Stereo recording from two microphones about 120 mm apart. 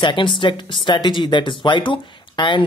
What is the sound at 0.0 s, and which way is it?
Speech, 45° left (ahead or behind).